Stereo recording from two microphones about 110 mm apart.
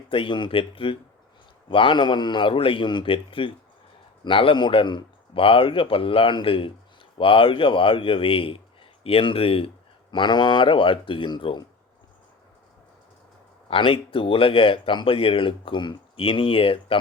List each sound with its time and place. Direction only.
0.1 s speech: 50° left (ahead or behind)
10.1 s speech: 45° left (ahead or behind)
13.7 s speech: 55° left (ahead or behind)